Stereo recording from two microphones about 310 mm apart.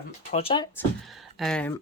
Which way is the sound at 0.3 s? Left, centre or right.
Centre.